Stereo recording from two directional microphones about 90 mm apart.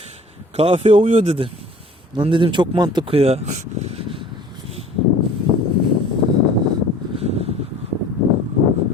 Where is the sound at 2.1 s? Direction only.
65° right (ahead or behind).